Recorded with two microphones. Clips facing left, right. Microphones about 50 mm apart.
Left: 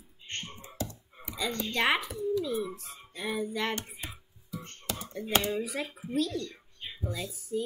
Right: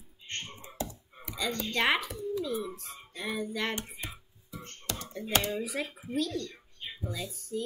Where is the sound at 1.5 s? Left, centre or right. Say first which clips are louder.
Even; centre.